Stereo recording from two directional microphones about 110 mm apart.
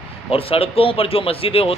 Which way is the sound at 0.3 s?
60° left (ahead or behind).